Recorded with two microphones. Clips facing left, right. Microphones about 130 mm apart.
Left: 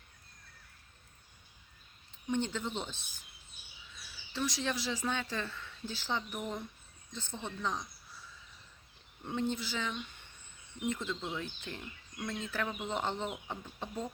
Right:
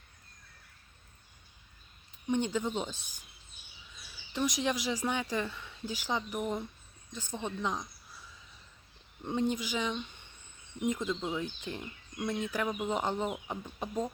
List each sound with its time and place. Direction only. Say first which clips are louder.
2.2 s speech: right 4 dB; 15° right (ahead or behind)
9.2 s speech: right 3 dB; 15° right (ahead or behind)